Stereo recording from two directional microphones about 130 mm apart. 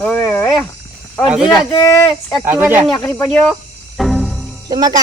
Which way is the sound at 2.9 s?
20° left (ahead or behind).